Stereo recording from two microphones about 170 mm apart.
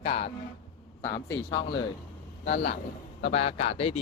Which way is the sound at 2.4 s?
85° left.